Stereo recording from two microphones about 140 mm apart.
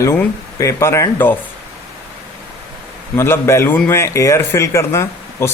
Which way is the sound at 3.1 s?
20° left (ahead or behind).